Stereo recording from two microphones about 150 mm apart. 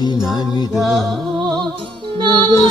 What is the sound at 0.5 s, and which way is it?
Music, 25° left (ahead or behind).